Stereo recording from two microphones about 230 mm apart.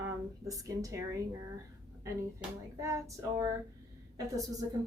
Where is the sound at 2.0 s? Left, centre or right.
Centre.